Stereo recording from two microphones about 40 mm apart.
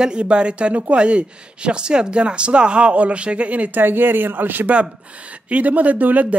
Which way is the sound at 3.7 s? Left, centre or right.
Right.